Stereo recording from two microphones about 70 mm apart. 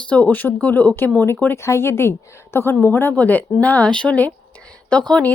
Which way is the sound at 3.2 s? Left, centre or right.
Left.